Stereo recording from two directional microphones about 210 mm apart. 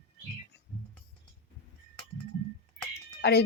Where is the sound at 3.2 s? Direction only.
50° left (ahead or behind).